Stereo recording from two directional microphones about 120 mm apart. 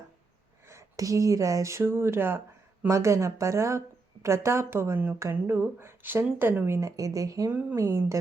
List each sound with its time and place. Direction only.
0.7 s a woman's voice: 25° right (ahead or behind)
7.5 s speech: 15° right (ahead or behind)
7.8 s a woman's voice: 25° right (ahead or behind)